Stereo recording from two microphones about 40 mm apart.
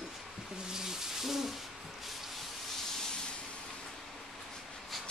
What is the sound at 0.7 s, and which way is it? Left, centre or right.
Owl, centre.